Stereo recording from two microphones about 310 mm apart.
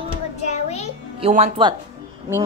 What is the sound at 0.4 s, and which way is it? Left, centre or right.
Music, left.